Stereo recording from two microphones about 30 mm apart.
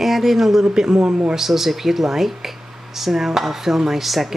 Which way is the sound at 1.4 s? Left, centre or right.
Centre.